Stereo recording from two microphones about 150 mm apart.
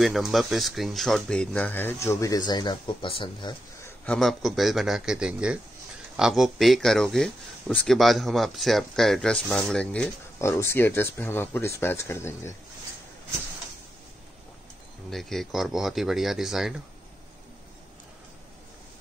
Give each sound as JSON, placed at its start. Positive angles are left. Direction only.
{"t": 0.0, "sound": "speech", "side_deg": 0}
{"t": 3.8, "sound": "speech", "side_deg": 10}
{"t": 10.4, "sound": "speech", "side_deg": 20}
{"t": 15.0, "sound": "speech", "side_deg": 0}